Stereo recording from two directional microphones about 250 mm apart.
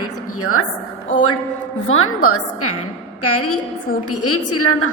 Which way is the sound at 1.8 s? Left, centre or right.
Left.